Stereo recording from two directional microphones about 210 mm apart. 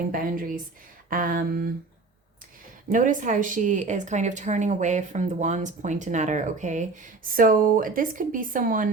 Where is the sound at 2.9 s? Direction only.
40° right (ahead or behind).